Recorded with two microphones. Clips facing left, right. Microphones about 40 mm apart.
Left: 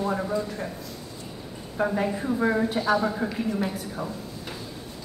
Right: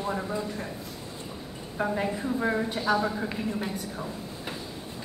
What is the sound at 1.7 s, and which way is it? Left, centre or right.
Speech, centre.